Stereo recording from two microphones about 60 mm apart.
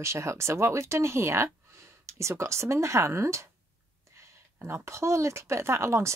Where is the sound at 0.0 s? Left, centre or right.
Right.